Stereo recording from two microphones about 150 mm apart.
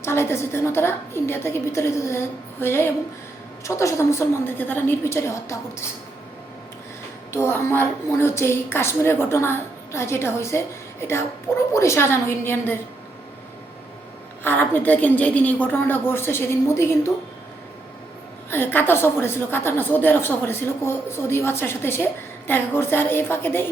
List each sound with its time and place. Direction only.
0.0 s a woman's voice: 15° left (ahead or behind)
7.3 s a woman's voice: 15° left (ahead or behind)
14.4 s a woman's voice: 15° left (ahead or behind)
18.5 s a woman's voice: 15° left (ahead or behind)